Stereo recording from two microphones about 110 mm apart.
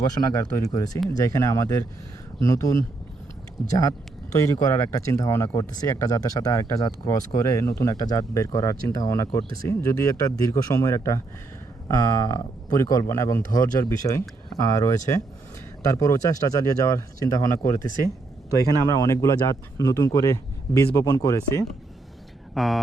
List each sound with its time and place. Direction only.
0.2 s speech: 30° left (ahead or behind)
22.5 s speech: centre (ahead or behind)